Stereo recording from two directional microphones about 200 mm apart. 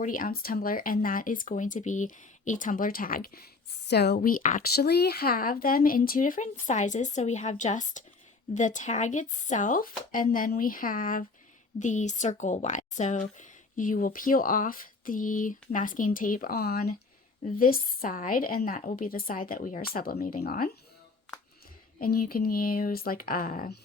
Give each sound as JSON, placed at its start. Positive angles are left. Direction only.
{"t": 0.0, "sound": "speech", "side_deg": 45}
{"t": 22.0, "sound": "speech", "side_deg": 45}